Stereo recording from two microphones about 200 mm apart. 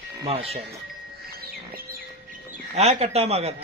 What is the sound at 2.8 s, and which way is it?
Speech, 30° right (ahead or behind).